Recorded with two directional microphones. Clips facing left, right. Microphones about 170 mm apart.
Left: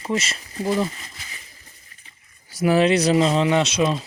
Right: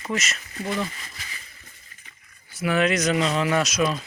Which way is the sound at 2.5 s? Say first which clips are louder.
Left 5 dB; 35° left (ahead or behind).